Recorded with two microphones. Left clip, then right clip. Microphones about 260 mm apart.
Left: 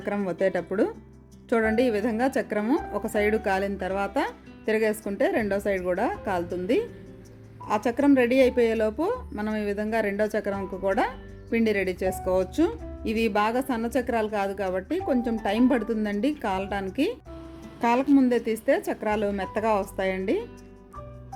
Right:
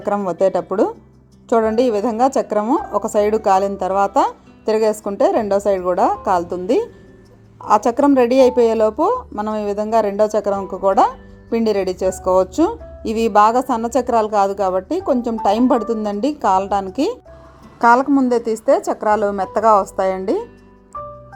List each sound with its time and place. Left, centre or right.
0.0 s speech: centre
7.6 s speech: centre